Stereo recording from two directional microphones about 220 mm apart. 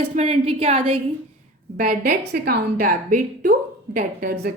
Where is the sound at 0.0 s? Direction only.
30° right (ahead or behind).